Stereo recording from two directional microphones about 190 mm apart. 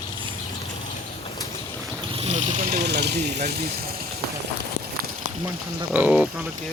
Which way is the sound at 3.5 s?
50° right (ahead or behind).